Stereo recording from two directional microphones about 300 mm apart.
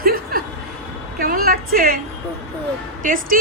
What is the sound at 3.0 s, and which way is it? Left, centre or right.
Speech, right.